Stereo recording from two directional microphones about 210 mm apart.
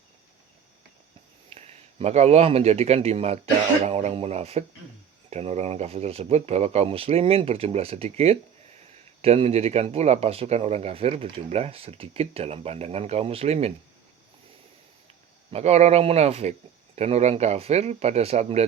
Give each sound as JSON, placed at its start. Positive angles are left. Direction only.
{"t": 1.5, "sound": "a man's voice", "side_deg": -30}
{"t": 15.5, "sound": "speech", "side_deg": -30}